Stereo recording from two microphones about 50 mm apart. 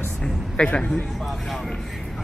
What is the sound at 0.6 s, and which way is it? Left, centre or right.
Speech, left.